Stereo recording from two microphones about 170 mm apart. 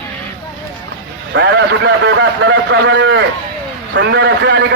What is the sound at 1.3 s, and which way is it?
A man's voice, 90° right.